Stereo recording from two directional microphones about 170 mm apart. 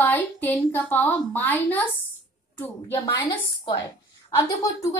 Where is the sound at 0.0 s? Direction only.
10° left (ahead or behind).